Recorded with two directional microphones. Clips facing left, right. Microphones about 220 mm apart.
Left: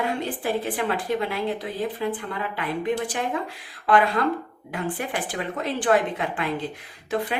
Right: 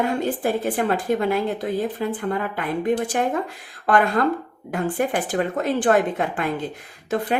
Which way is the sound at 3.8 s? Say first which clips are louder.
Right 2 dB; 45° right (ahead or behind).